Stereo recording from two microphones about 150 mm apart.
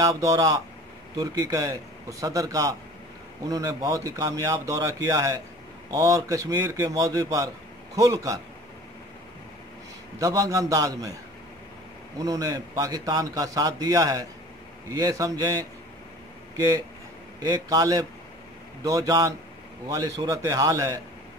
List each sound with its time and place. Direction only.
0.0 s a man's voice: 20° right (ahead or behind)
10.1 s a man's voice: 20° right (ahead or behind)
12.2 s a man's voice: 25° right (ahead or behind)